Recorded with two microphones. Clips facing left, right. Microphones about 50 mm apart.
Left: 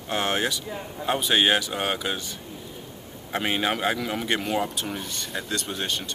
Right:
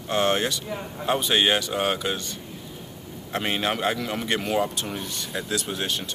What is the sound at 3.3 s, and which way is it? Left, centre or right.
Speech, centre.